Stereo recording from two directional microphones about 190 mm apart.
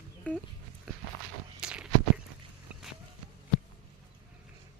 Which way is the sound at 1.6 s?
5° right (ahead or behind).